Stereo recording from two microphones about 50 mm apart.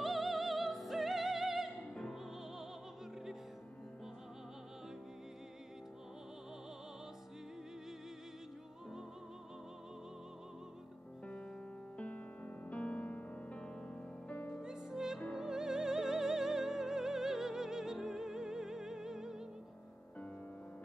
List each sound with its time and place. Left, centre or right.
0.0 s music: centre
12.0 s music: left
14.6 s music: centre